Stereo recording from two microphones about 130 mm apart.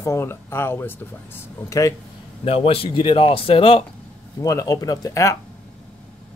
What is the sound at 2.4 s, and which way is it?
Speech, 45° left (ahead or behind).